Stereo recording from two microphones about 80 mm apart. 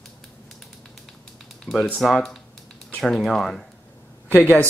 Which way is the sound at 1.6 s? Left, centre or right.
Centre.